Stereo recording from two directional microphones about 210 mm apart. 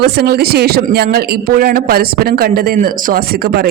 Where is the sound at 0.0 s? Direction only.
50° right (ahead or behind).